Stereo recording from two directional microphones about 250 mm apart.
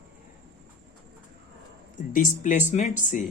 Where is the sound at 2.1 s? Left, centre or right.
Left.